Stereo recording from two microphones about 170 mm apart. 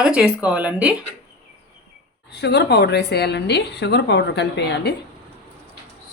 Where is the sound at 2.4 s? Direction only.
85° left.